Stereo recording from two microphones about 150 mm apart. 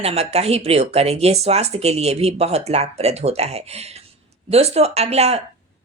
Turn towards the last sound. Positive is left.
turn(degrees=-45)  # may be behind; listen again after turning